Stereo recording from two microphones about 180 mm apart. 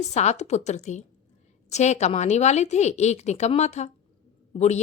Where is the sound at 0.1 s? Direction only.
40° left (ahead or behind).